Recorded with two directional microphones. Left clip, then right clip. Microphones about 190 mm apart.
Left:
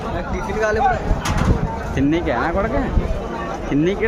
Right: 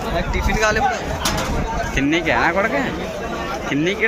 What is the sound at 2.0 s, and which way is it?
Speech, 25° left (ahead or behind).